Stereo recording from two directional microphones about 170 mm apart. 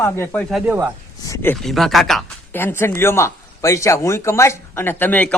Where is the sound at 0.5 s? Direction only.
10° right (ahead or behind).